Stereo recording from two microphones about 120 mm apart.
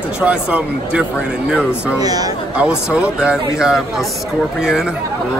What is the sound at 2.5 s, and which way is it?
Speech, 10° right (ahead or behind).